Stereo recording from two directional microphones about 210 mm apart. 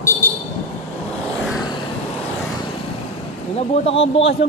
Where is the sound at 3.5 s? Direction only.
30° left (ahead or behind).